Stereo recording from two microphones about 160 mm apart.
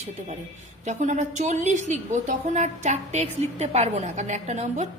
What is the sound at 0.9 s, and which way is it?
A woman's voice, 50° right (ahead or behind).